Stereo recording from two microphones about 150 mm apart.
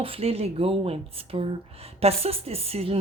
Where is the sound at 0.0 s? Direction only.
40° right (ahead or behind).